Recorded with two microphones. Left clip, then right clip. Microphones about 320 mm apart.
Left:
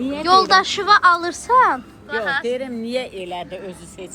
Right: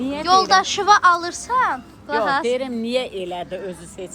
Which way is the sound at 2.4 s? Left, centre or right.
Right.